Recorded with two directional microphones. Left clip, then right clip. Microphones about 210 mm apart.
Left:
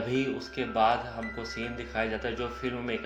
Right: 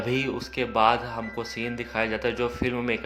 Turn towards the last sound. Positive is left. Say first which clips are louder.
# right 6 dB
turn(degrees=-30)  # may be behind; listen again after turning